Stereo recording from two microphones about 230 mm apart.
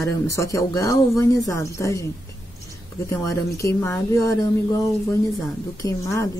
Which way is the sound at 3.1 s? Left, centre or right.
Centre.